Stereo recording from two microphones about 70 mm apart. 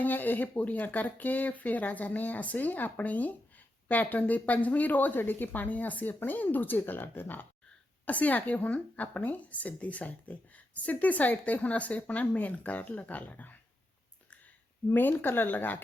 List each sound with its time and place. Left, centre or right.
0.0 s a woman's voice: left
14.9 s a woman's voice: left